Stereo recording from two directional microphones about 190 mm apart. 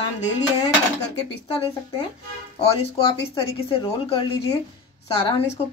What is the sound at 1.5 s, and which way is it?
A woman's voice, 30° left (ahead or behind).